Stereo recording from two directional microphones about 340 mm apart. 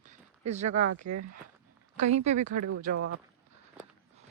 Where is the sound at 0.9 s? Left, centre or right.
Right.